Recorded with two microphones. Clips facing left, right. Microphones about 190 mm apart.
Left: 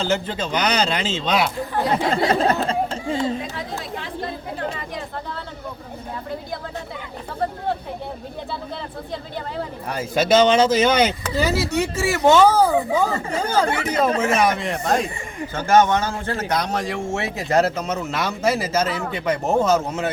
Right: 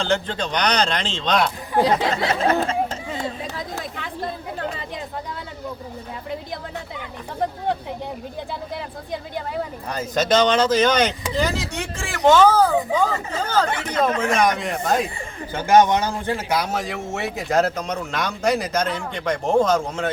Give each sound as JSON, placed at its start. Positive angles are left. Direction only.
{"t": 0.0, "sound": "speech", "side_deg": 5}
{"t": 2.2, "sound": "speech", "side_deg": 35}
{"t": 9.9, "sound": "a man's voice", "side_deg": 10}
{"t": 15.5, "sound": "a man's voice", "side_deg": -15}